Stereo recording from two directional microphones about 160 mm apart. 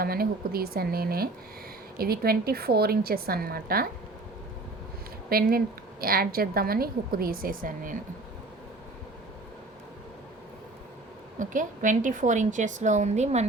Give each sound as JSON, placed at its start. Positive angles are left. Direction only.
{"t": 0.0, "sound": "a woman's voice", "side_deg": -70}
{"t": 5.3, "sound": "a woman's voice", "side_deg": -70}
{"t": 11.3, "sound": "a woman's voice", "side_deg": -55}